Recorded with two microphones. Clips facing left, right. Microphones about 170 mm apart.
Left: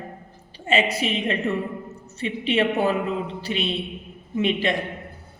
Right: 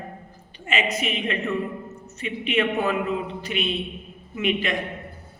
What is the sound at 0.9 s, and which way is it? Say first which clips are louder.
A woman's voice: left 2 dB; 30° left (ahead or behind).